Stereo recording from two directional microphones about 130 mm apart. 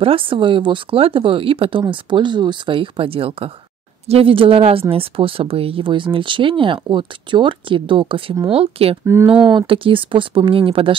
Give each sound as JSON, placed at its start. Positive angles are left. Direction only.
{"t": 0.0, "sound": "speech", "side_deg": -45}
{"t": 9.0, "sound": "speech", "side_deg": -20}
{"t": 9.5, "sound": "speech", "side_deg": -40}